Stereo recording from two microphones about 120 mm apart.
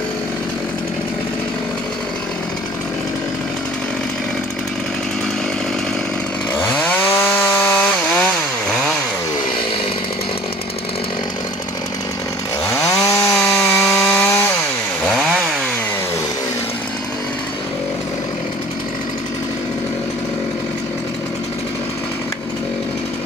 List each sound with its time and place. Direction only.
7.2 s chainsaw: 20° left (ahead or behind)
12.8 s chainsaw: 25° left (ahead or behind)
13.8 s chainsaw: 5° left (ahead or behind)
14.1 s chainsaw: 15° left (ahead or behind)